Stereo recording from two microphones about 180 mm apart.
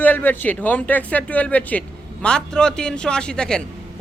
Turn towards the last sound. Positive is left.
turn(degrees=5)  # may be behind; listen again after turning